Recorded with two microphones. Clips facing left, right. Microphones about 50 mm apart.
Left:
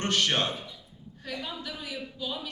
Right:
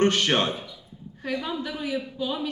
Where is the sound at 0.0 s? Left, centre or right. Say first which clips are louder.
Right 5 dB; right.